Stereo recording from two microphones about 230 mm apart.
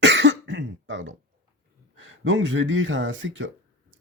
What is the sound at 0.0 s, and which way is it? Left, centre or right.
Cough, right.